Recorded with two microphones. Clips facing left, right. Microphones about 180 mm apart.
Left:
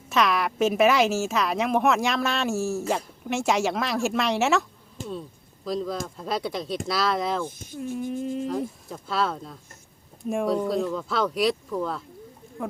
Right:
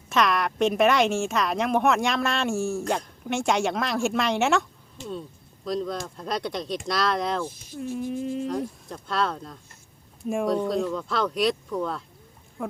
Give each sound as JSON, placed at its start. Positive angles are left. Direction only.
{"t": 0.1, "sound": "a woman's voice", "side_deg": 0}
{"t": 5.6, "sound": "a woman's voice", "side_deg": 0}
{"t": 12.6, "sound": "a sound", "side_deg": 0}